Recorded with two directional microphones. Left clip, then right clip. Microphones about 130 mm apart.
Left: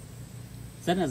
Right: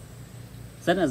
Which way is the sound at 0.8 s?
15° right (ahead or behind).